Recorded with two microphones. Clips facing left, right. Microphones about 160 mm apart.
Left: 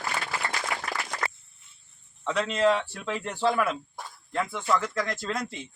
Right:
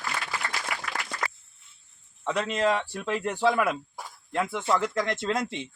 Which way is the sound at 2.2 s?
10° right (ahead or behind).